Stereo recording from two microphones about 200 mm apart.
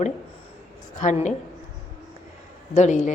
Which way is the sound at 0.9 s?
40° left (ahead or behind).